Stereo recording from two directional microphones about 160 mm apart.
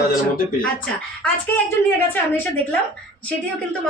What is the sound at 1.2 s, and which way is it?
Speech, 10° left (ahead or behind).